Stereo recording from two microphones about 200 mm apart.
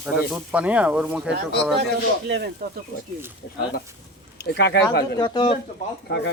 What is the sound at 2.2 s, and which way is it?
Speech, 55° right (ahead or behind).